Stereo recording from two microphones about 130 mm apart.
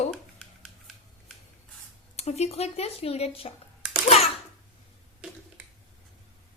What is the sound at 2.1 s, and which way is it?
A woman's voice, 55° left (ahead or behind).